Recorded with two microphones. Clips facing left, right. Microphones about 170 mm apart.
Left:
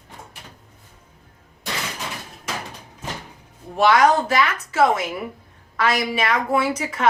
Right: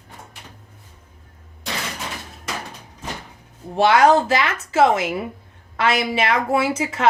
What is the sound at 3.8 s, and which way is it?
A woman's voice, 30° right (ahead or behind).